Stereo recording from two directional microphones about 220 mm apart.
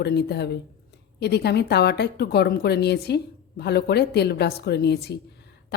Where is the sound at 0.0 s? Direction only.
50° left (ahead or behind).